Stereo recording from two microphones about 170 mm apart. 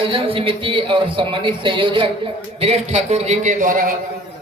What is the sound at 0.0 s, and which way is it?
Speech, 30° right (ahead or behind).